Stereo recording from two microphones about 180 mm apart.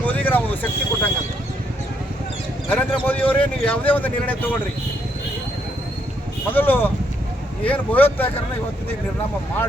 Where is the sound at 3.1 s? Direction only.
10° left (ahead or behind).